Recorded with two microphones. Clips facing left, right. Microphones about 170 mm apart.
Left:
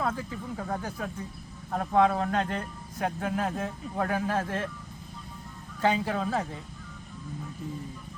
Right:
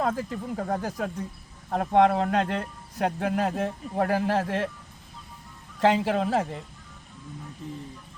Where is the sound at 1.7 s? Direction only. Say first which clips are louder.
Right 3 dB; 55° right (ahead or behind).